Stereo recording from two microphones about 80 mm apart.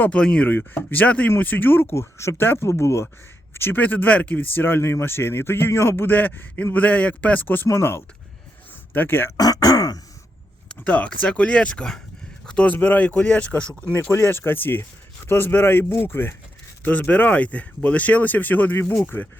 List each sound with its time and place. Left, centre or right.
0.0 s speech: centre
9.4 s throat clearing: left
10.8 s speech: centre